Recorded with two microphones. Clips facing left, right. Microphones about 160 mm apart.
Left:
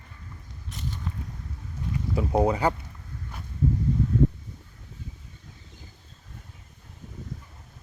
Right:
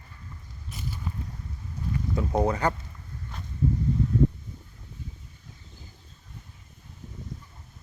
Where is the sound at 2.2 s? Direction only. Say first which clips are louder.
Left 3 dB; 10° left (ahead or behind).